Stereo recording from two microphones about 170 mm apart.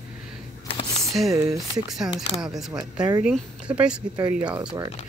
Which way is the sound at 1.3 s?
20° right (ahead or behind).